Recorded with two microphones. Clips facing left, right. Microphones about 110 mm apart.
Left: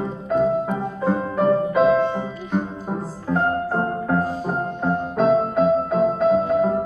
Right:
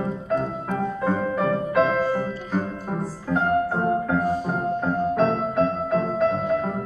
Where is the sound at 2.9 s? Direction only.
5° left (ahead or behind).